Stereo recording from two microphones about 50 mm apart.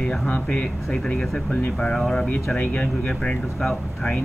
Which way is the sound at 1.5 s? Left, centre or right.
Left.